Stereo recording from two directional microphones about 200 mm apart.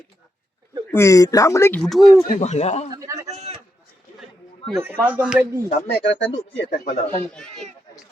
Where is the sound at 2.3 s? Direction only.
35° left (ahead or behind).